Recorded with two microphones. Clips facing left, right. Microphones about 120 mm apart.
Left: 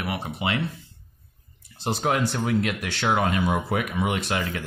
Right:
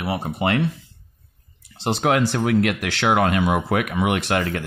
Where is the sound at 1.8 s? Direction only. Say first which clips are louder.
Right 5 dB; 75° right (ahead or behind).